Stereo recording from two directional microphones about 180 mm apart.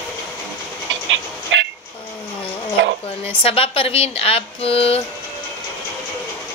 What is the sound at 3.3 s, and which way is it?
Speech, 30° left (ahead or behind).